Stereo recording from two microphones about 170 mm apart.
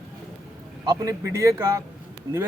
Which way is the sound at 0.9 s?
20° right (ahead or behind).